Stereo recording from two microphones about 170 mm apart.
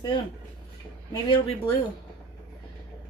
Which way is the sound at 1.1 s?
30° left (ahead or behind).